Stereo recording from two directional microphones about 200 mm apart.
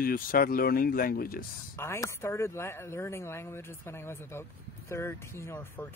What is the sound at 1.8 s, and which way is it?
Speech, 15° left (ahead or behind).